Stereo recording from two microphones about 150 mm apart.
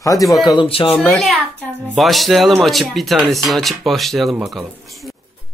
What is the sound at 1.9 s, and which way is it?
Speech, centre (ahead or behind).